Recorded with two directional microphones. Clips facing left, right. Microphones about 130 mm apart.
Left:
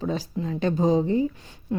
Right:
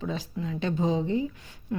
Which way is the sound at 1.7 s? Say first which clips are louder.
Left 4 dB; 25° left (ahead or behind).